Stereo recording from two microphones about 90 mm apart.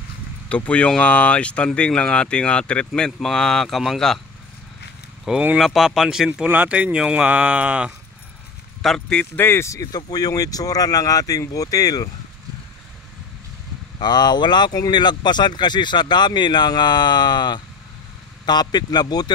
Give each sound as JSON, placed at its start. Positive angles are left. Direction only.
{"t": 0.5, "sound": "speech", "side_deg": 15}
{"t": 5.3, "sound": "speech", "side_deg": -5}
{"t": 8.8, "sound": "speech", "side_deg": 5}
{"t": 9.2, "sound": "speech", "side_deg": 25}
{"t": 9.9, "sound": "speech", "side_deg": 45}
{"t": 13.9, "sound": "speech", "side_deg": 55}